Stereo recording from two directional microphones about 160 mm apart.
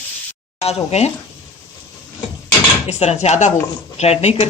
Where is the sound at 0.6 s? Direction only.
40° left (ahead or behind).